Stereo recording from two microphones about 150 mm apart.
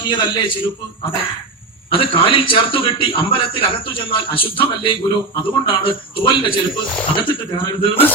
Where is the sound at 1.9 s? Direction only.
35° left (ahead or behind).